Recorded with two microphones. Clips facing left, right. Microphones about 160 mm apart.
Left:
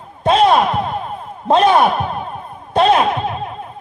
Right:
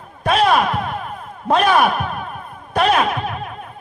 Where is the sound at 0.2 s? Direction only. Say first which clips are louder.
Left 3 dB; 25° left (ahead or behind).